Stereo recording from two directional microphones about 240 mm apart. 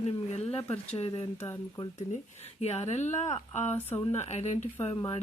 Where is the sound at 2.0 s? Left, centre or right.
Left.